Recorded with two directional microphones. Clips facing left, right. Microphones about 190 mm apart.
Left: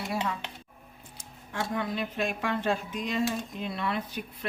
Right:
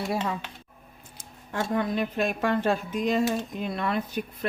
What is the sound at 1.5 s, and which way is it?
Speech, 45° right (ahead or behind).